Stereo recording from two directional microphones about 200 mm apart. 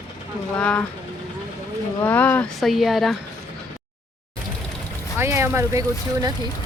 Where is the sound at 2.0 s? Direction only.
10° left (ahead or behind).